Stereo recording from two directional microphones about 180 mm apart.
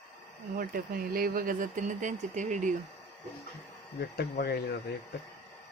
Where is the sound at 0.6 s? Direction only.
55° right (ahead or behind).